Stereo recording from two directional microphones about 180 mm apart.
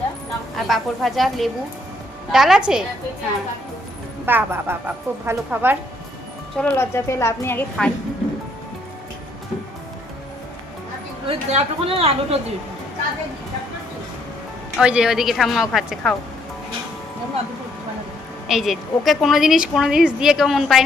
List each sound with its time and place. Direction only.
0.5 s a woman's voice: centre (ahead or behind)
4.3 s a woman's voice: 10° right (ahead or behind)
6.6 s a woman's voice: 10° left (ahead or behind)
11.3 s a woman's voice: 30° right (ahead or behind)
14.8 s a woman's voice: 5° right (ahead or behind)
18.4 s a woman's voice: centre (ahead or behind)